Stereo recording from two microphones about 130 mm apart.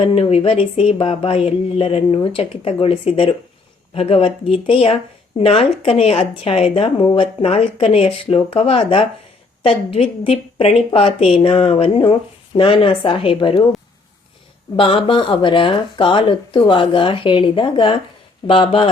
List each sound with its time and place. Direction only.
0.0 s speech: 50° left (ahead or behind)
14.8 s speech: 40° left (ahead or behind)